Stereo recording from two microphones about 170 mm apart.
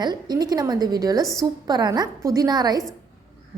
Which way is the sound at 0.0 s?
25° right (ahead or behind).